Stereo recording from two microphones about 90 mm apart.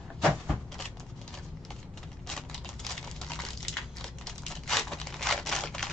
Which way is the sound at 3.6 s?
5° left (ahead or behind).